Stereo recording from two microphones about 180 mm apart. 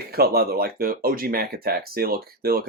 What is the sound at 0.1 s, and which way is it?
Speech, 60° right (ahead or behind).